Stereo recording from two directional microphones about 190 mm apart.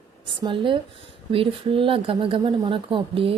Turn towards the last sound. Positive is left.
turn(degrees=-30)  # may be behind; listen again after turning